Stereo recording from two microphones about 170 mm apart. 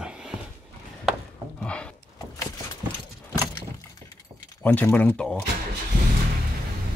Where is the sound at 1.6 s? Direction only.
5° left (ahead or behind).